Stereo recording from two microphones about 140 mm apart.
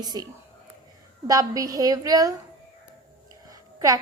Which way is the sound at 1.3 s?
25° right (ahead or behind).